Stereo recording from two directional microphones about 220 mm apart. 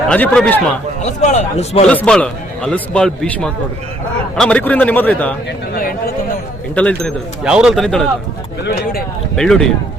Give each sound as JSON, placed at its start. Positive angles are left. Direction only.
{"t": 0.1, "sound": "a man's voice", "side_deg": 5}
{"t": 1.0, "sound": "a man's voice", "side_deg": 30}
{"t": 1.9, "sound": "a man's voice", "side_deg": 5}
{"t": 6.7, "sound": "a man's voice", "side_deg": 5}
{"t": 8.6, "sound": "speech", "side_deg": 45}
{"t": 9.3, "sound": "a man's voice", "side_deg": 0}